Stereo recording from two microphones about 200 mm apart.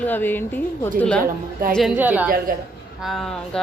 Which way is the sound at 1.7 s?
Centre (ahead or behind).